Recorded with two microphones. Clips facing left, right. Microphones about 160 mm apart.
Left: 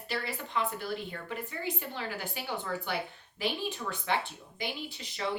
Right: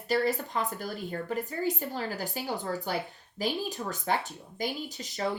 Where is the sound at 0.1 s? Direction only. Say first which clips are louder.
Right 7 dB; 40° right (ahead or behind).